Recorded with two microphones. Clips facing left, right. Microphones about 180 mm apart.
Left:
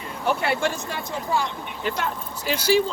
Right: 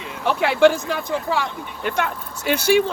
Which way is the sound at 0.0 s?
90° right.